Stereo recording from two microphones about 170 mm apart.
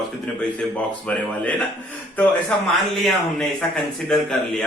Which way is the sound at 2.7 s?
Centre (ahead or behind).